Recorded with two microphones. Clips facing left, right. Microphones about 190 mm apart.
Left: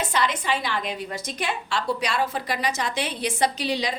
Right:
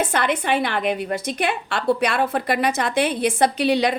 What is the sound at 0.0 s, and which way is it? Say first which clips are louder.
A woman's voice: right 4 dB; 55° right (ahead or behind).